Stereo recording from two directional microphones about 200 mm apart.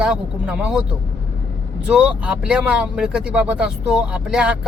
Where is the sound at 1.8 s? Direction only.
5° right (ahead or behind).